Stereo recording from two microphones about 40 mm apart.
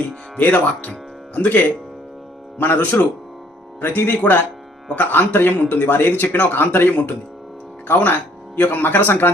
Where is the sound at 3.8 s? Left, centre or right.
Left.